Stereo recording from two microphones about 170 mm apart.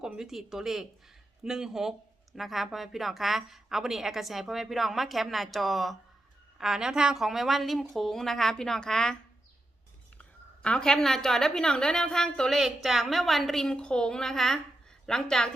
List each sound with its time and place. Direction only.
0.0 s speech: 5° right (ahead or behind)
10.2 s speech: 5° left (ahead or behind)